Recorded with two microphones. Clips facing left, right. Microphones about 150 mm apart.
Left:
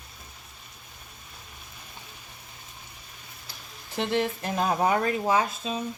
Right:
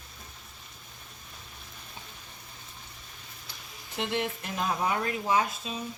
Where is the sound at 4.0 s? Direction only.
40° left (ahead or behind).